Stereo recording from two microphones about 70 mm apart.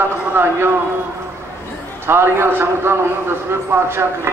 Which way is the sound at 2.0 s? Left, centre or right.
Right.